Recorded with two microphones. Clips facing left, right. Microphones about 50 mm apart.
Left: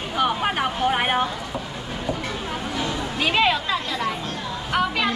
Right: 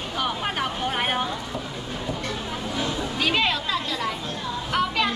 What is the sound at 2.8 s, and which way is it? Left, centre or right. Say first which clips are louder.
Chatter: even; centre.